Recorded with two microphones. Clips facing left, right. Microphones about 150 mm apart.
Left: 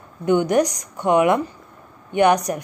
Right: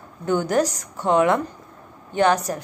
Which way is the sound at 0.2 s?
15° left (ahead or behind).